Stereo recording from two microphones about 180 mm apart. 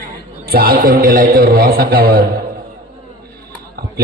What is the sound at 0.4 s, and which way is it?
A man's voice, 60° right (ahead or behind).